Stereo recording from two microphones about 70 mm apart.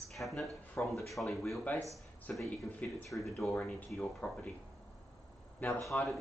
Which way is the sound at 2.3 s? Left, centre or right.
Centre.